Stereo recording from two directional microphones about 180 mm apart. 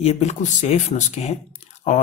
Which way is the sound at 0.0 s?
35° left (ahead or behind).